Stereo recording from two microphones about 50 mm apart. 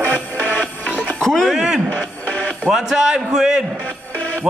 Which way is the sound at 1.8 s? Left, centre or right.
Left.